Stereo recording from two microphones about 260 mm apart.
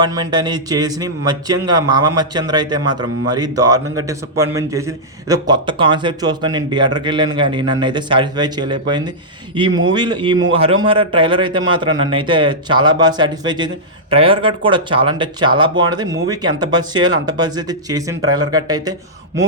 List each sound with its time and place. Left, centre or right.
0.0 s a man's voice: centre